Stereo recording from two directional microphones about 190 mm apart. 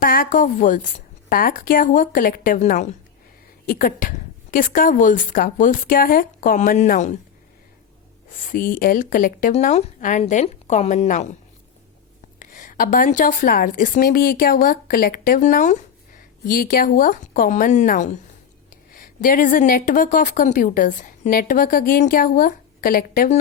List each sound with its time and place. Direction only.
0.0 s a woman's voice: 50° left (ahead or behind)
8.4 s speech: 50° left (ahead or behind)
12.4 s a woman's voice: 45° left (ahead or behind)